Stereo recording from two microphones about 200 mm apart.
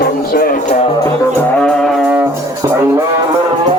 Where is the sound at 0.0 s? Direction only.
45° left (ahead or behind).